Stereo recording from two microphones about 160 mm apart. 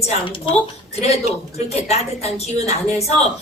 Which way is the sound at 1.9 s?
40° left (ahead or behind).